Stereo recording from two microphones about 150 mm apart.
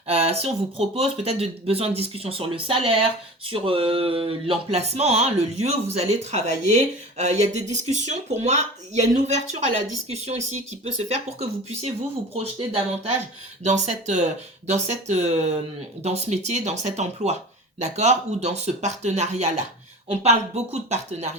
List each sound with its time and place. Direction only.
0.1 s speech: 40° right (ahead or behind)